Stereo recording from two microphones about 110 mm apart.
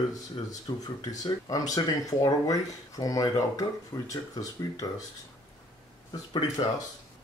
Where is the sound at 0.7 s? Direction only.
40° left (ahead or behind).